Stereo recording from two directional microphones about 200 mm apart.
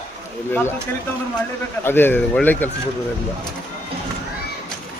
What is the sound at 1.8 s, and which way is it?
Speech, 10° left (ahead or behind).